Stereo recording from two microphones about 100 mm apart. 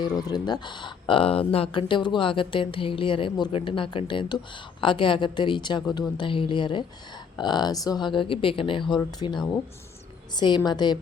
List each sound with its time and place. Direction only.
0.0 s speech: 40° left (ahead or behind); by 6.8 s 55° left (ahead or behind)
7.3 s speech: 45° left (ahead or behind)